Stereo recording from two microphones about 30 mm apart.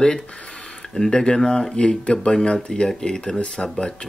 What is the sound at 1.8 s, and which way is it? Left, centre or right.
Speech, left.